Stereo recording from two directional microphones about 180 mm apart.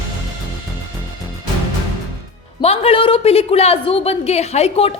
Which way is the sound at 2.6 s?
35° left (ahead or behind).